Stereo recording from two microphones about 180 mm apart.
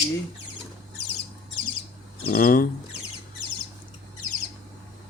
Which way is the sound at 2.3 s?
50° left (ahead or behind).